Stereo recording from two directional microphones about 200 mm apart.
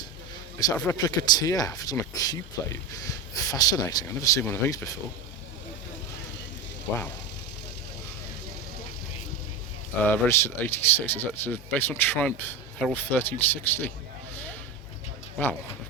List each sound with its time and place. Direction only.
0.8 s speech: 15° left (ahead or behind)
10.0 s speech: 10° left (ahead or behind)